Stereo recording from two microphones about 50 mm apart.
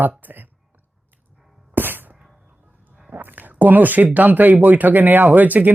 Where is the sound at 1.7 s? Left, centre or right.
Right.